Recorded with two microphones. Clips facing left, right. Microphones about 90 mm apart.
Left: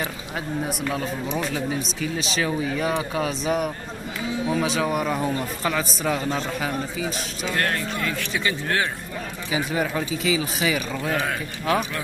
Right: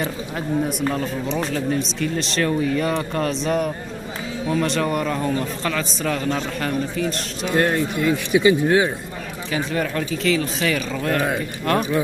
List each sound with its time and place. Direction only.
0.9 s a man's voice: 5° left (ahead or behind)
7.4 s a man's voice: 20° right (ahead or behind)
9.5 s a man's voice: 10° left (ahead or behind)